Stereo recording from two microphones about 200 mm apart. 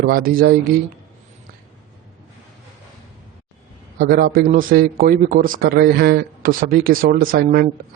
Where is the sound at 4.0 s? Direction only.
50° right (ahead or behind).